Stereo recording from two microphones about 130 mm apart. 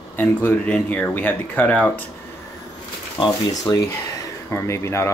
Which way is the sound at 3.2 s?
30° left (ahead or behind).